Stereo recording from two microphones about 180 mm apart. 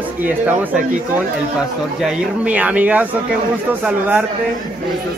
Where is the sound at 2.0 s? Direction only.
5° right (ahead or behind).